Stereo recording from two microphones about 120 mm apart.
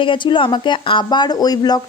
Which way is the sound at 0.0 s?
45° left (ahead or behind).